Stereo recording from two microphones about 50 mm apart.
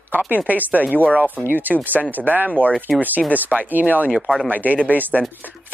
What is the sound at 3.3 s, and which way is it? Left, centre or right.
Speech, right.